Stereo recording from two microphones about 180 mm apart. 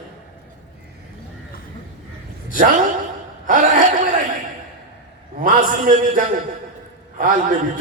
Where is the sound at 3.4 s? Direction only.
45° right (ahead or behind).